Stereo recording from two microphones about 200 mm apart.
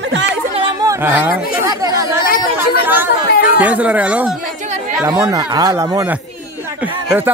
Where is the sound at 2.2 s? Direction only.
45° left (ahead or behind).